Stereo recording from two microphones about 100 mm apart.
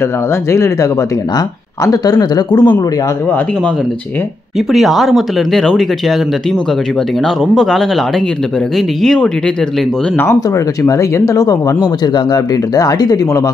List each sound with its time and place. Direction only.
0.5 s speech: 30° left (ahead or behind)
1.9 s speech: 40° left (ahead or behind)
4.6 s speech: centre (ahead or behind)
7.2 s speech: 5° left (ahead or behind)
10.1 s speech: 25° left (ahead or behind)